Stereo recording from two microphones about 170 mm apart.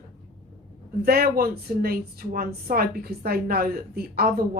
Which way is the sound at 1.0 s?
60° right (ahead or behind).